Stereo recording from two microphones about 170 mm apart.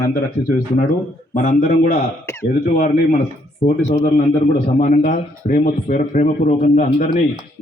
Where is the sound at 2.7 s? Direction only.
45° left (ahead or behind).